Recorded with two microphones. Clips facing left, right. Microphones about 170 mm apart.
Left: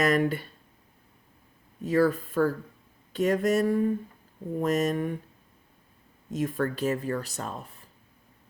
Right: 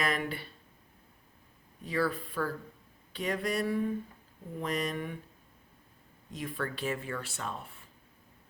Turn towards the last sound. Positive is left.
turn(degrees=40)  # may be behind; listen again after turning